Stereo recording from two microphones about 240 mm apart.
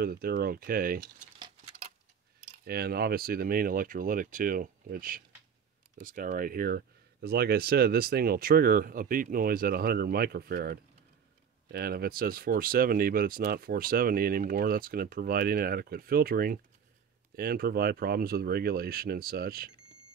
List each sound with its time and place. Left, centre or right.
0.0 s speech: right
2.6 s speech: right